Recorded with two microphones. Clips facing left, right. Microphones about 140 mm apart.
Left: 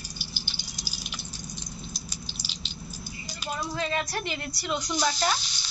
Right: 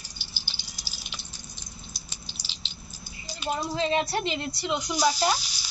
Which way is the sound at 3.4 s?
25° right (ahead or behind).